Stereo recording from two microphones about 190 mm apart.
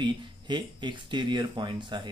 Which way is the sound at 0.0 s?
25° right (ahead or behind).